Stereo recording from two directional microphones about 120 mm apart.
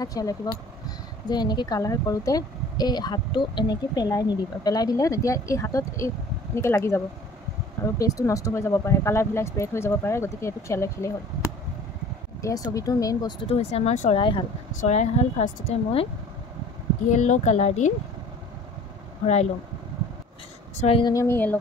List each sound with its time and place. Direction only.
0.0 s speech: 30° left (ahead or behind)
12.4 s speech: 25° left (ahead or behind)
13.4 s speech: 55° left (ahead or behind); by 14.1 s 70° left (ahead or behind)
14.1 s speech: 45° left (ahead or behind)
14.8 s a woman's voice: 70° left (ahead or behind)
17.1 s speech: 90° left
21.0 s speech: 25° left (ahead or behind)